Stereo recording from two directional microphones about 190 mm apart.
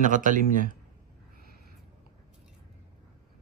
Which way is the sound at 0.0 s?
45° right (ahead or behind).